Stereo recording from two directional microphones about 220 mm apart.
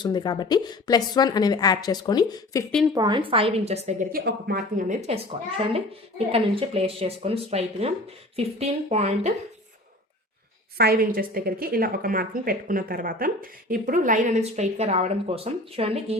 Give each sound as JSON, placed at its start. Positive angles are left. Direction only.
{"t": 0.0, "sound": "a woman's voice", "side_deg": 20}
{"t": 2.9, "sound": "a woman's voice", "side_deg": -20}
{"t": 4.1, "sound": "a woman's voice", "side_deg": -45}
{"t": 10.8, "sound": "a woman's voice", "side_deg": -45}